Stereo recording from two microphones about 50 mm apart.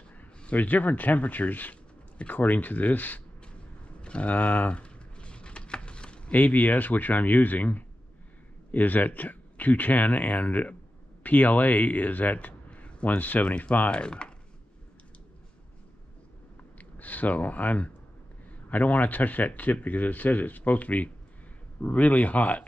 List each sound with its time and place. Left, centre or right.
0.5 s a man's voice: left
4.0 s a sound: left
6.3 s a man's voice: left
17.0 s a man's voice: left